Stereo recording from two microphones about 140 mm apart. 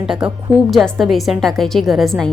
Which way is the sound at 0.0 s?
5° right (ahead or behind).